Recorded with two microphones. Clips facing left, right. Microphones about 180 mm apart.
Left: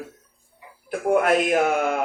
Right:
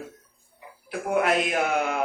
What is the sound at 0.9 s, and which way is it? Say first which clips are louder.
A man's voice: left 4 dB; 50° left (ahead or behind).